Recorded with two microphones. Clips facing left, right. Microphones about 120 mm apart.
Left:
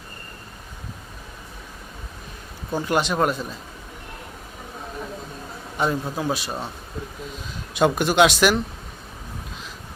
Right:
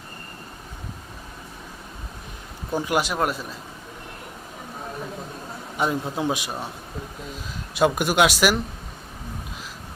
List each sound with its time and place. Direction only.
2.7 s speech: 10° right (ahead or behind)
5.7 s a man's voice: 10° right (ahead or behind)
7.7 s speech: 5° right (ahead or behind)